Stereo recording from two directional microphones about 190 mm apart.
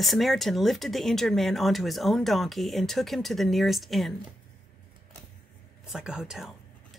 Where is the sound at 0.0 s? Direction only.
Centre (ahead or behind).